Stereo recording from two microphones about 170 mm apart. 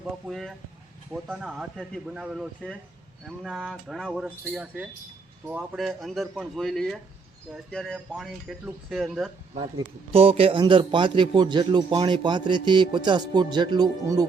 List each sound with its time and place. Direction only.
0.0 s speech: centre (ahead or behind)
9.7 s a man's voice: 35° right (ahead or behind)